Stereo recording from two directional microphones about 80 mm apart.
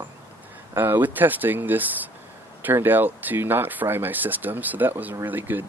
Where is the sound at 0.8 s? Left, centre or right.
Right.